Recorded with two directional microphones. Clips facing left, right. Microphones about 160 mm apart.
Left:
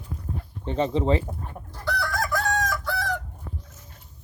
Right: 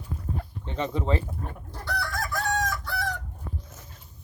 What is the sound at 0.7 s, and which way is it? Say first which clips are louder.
Chicken: left 6 dB; 30° left (ahead or behind).